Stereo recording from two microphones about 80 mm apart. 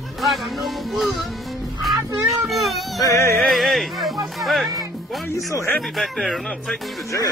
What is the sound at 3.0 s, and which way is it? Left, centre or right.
Yodeling, left.